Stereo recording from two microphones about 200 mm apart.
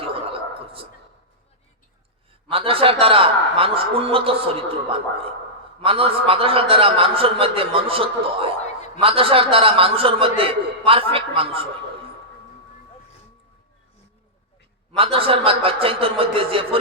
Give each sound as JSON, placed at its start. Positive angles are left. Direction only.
{"t": 0.0, "sound": "a sound", "side_deg": -30}
{"t": 2.5, "sound": "a man's voice", "side_deg": -30}
{"t": 14.9, "sound": "a man's voice", "side_deg": -30}